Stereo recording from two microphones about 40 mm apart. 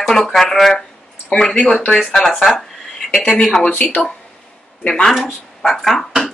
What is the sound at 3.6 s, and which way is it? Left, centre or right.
Speech, left.